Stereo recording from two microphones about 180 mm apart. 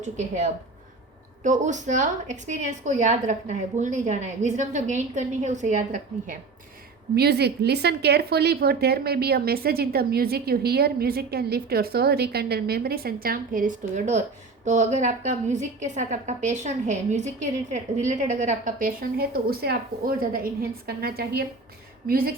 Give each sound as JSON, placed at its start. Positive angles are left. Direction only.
{"t": 0.0, "sound": "a woman's voice", "side_deg": -40}
{"t": 7.2, "sound": "a woman's voice", "side_deg": -65}